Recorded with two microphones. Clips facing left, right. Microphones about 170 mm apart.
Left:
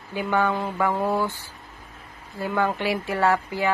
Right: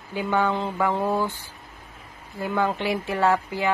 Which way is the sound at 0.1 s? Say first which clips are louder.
Even; 15° right (ahead or behind).